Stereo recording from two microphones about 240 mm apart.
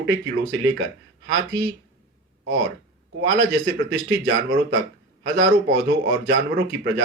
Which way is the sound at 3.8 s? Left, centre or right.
Right.